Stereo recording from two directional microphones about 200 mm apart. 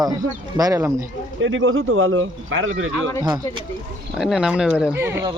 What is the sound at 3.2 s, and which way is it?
Speech, 20° right (ahead or behind).